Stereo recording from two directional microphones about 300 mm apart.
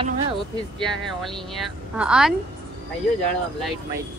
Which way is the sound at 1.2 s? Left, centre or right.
Centre.